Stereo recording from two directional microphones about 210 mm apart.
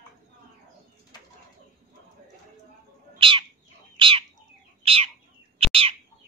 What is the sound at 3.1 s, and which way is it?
Bird, 25° right (ahead or behind).